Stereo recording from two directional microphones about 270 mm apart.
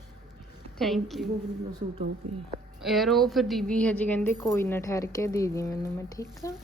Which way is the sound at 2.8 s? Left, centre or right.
Centre.